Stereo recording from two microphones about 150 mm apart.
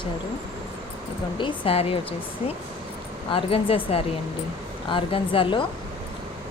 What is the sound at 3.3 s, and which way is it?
Speech, 35° left (ahead or behind).